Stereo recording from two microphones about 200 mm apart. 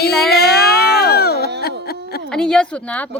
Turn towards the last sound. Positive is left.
turn(degrees=5)  # may be behind; listen again after turning